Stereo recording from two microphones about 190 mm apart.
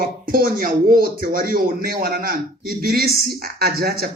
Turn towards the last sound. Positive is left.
turn(degrees=-55)  # may be behind; listen again after turning